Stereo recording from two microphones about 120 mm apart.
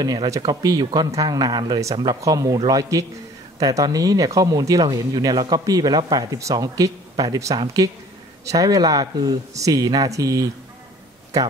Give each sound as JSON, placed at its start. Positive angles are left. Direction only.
{"t": 0.0, "sound": "speech", "side_deg": -35}